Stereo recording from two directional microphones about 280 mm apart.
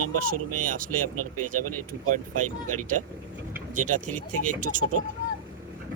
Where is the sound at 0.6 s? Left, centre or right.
Right.